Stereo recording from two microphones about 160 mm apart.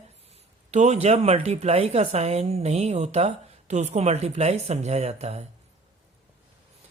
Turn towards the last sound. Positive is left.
turn(degrees=-40)  # may be behind; listen again after turning